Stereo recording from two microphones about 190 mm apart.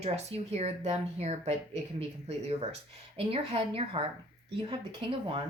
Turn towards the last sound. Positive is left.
turn(degrees=-25)  # may be behind; listen again after turning